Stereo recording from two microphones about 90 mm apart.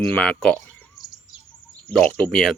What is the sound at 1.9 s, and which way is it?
Speech, 10° left (ahead or behind).